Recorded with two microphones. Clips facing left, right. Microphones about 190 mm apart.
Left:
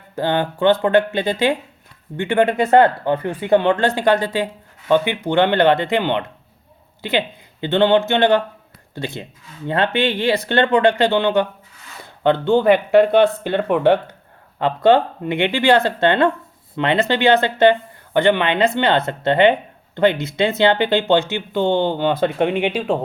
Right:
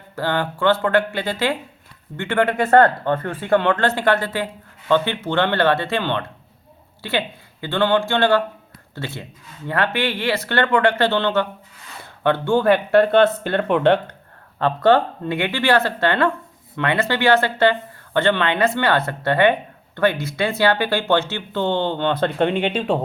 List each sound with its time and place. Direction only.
0.2 s speech: 20° left (ahead or behind)